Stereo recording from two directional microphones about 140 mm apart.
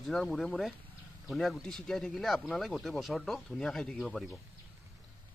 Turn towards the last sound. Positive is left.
turn(degrees=5)  # may be behind; listen again after turning